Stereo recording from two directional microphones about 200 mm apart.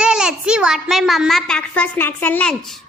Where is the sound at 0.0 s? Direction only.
5° right (ahead or behind).